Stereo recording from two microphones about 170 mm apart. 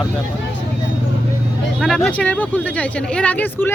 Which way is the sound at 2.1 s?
10° left (ahead or behind).